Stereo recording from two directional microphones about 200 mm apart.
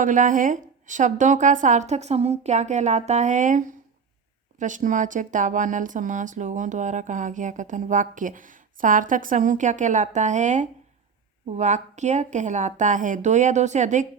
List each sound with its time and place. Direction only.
0.0 s speech: 40° right (ahead or behind)